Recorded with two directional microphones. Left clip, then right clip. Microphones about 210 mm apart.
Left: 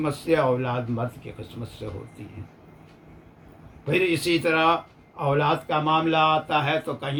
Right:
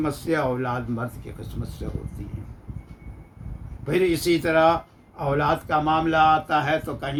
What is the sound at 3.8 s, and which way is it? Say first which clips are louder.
Speech: right 1 dB; 15° right (ahead or behind).